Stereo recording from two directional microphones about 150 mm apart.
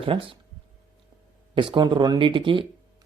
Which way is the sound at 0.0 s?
35° right (ahead or behind).